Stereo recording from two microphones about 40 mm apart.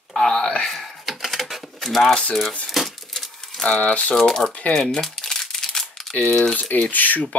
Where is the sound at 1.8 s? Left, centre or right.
Centre.